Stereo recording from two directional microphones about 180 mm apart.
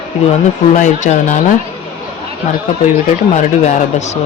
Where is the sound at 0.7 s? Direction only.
45° left (ahead or behind).